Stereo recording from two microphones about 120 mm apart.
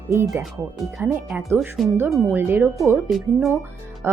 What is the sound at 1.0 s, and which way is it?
Speech, 10° right (ahead or behind).